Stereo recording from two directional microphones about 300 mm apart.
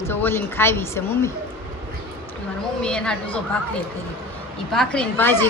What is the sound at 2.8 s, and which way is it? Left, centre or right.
Speech, centre.